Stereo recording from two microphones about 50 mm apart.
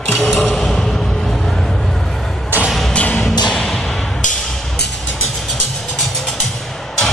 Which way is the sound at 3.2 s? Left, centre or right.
Centre.